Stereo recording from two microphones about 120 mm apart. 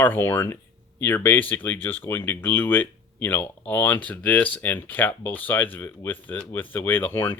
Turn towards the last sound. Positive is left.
turn(degrees=15)  # may be behind; listen again after turning